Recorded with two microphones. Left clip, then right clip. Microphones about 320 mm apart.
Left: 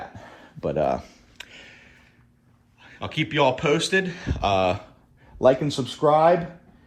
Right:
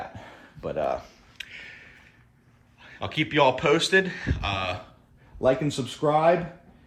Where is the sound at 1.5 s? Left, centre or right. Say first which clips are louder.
Right 3 dB; centre.